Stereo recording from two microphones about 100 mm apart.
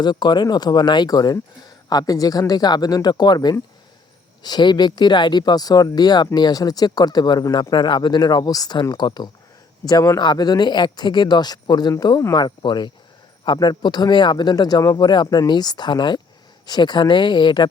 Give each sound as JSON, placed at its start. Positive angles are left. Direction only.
{"t": 0.0, "sound": "speech", "side_deg": 45}